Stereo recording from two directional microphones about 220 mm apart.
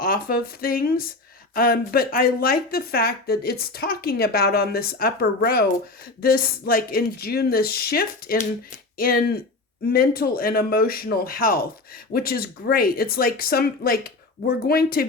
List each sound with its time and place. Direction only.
0.0 s speech: 40° left (ahead or behind)